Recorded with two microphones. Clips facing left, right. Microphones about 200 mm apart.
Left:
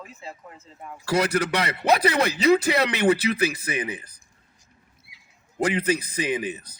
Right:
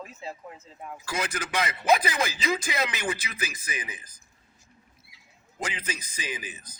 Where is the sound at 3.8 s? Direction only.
35° left (ahead or behind).